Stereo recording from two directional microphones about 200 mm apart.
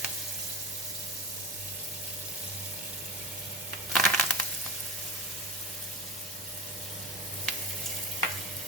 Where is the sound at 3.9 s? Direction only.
5° left (ahead or behind).